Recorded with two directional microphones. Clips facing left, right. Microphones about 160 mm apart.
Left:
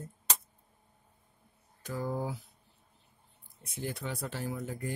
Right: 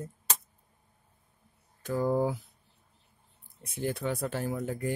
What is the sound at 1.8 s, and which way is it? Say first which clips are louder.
Speech: right 8 dB; 50° right (ahead or behind).